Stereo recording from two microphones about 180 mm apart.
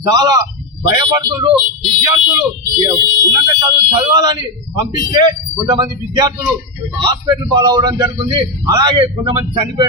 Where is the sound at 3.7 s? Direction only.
20° right (ahead or behind).